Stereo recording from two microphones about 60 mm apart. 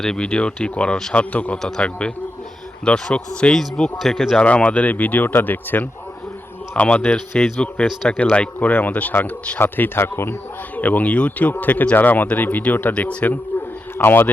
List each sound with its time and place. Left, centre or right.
0.0 s speech: centre
1.6 s speech: centre
4.0 s speech: centre
4.4 s speech: centre
7.3 s speech: centre
8.1 s speech: centre; by 10.3 s left
10.8 s speech: left
12.9 s speech: centre
14.0 s speech: left